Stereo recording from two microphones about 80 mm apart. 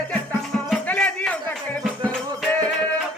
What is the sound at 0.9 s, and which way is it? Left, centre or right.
Music, centre.